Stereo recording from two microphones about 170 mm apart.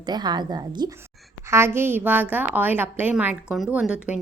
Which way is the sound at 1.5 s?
15° right (ahead or behind).